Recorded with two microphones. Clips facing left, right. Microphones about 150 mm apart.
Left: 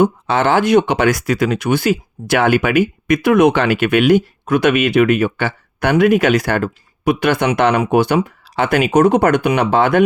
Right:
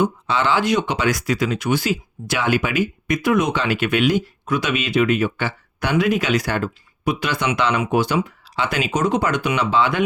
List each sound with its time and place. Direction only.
0.0 s speech: 50° left (ahead or behind)